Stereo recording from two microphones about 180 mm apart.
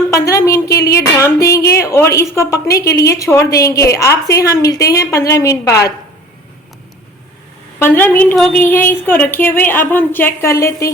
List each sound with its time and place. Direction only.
0.1 s a woman's voice: 15° left (ahead or behind)
7.8 s a woman's voice: 10° left (ahead or behind)